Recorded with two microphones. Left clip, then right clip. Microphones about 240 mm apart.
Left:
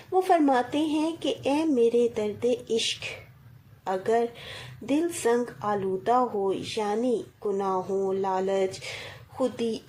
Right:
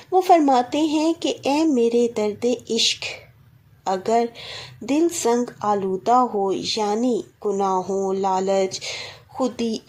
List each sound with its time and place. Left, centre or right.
0.1 s speech: right